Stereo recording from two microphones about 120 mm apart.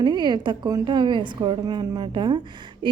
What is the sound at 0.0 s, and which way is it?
A woman's voice, 35° right (ahead or behind).